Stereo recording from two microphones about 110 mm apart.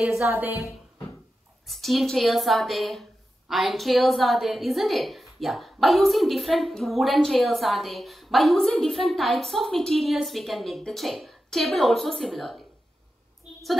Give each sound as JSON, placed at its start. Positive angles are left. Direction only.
{"t": 0.2, "sound": "a woman's voice", "side_deg": -20}
{"t": 1.7, "sound": "a woman's voice", "side_deg": 0}